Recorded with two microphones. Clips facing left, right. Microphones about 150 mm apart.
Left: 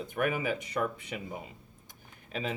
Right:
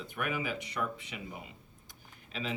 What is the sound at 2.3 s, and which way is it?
Speech, 45° left (ahead or behind).